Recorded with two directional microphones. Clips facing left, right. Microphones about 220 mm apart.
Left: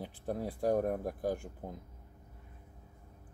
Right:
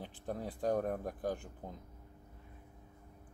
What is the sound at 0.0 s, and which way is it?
Speech, 10° left (ahead or behind).